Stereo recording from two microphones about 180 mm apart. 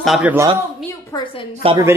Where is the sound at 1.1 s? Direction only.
30° left (ahead or behind).